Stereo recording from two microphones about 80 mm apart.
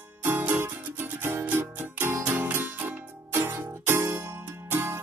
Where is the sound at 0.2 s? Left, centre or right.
Right.